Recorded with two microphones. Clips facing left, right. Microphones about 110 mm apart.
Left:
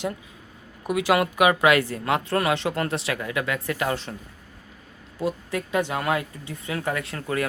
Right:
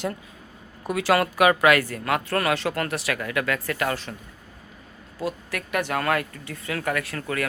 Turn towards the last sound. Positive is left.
turn(degrees=25)  # may be behind; listen again after turning